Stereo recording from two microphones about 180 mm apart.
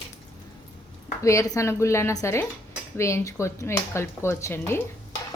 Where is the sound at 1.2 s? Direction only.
15° left (ahead or behind).